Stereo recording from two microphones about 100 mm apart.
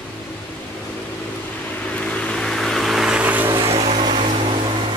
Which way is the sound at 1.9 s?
10° left (ahead or behind).